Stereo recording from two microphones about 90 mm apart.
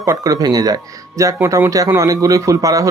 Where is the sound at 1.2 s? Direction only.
35° right (ahead or behind).